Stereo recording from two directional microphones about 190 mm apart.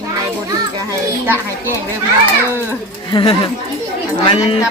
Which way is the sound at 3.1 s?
30° left (ahead or behind).